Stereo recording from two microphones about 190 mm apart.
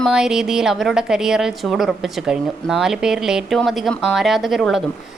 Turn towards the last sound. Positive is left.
turn(degrees=0)  # may be behind; listen again after turning